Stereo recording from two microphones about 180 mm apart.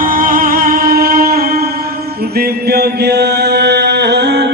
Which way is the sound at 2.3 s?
60° right (ahead or behind).